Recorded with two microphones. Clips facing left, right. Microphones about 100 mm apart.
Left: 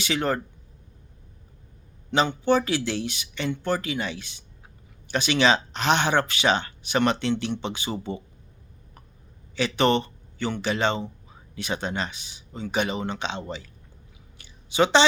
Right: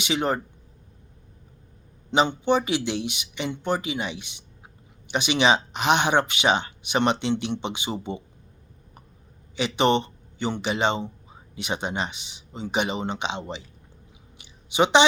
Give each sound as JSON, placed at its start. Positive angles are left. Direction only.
{"t": 0.0, "sound": "speech", "side_deg": -20}
{"t": 2.0, "sound": "speech", "side_deg": -25}
{"t": 9.6, "sound": "speech", "side_deg": -20}
{"t": 14.3, "sound": "a sound", "side_deg": -20}